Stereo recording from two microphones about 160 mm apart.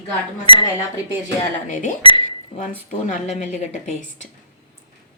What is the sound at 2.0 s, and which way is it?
Speech, 30° left (ahead or behind).